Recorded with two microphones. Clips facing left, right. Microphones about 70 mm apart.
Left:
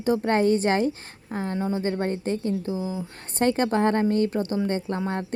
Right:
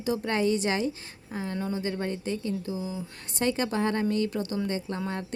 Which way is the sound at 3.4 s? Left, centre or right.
Left.